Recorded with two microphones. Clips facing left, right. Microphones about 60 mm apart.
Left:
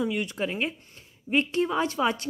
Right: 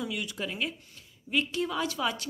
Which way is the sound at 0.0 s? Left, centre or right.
Left.